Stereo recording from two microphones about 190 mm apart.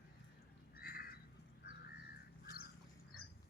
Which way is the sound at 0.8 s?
50° left (ahead or behind).